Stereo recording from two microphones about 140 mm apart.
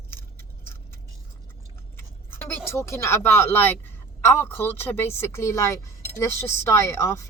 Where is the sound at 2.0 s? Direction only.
15° left (ahead or behind).